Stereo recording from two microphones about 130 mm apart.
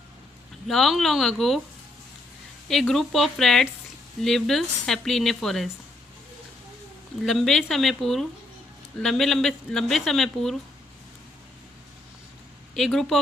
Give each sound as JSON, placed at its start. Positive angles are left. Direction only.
{"t": 0.7, "sound": "speech", "side_deg": 0}
{"t": 2.6, "sound": "speech", "side_deg": 0}
{"t": 7.3, "sound": "speech", "side_deg": 0}
{"t": 12.7, "sound": "speech", "side_deg": 0}